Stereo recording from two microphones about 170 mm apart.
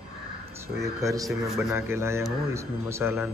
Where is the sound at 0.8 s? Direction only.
20° right (ahead or behind).